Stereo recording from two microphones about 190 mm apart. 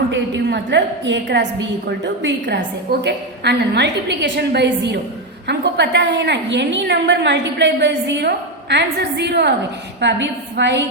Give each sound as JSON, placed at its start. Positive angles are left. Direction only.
{"t": 0.1, "sound": "a woman's voice", "side_deg": -65}